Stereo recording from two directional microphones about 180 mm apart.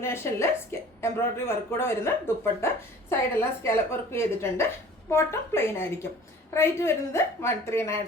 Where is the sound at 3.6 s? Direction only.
15° left (ahead or behind).